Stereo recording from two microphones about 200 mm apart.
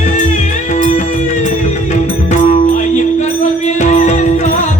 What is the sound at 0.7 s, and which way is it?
Music, 40° left (ahead or behind).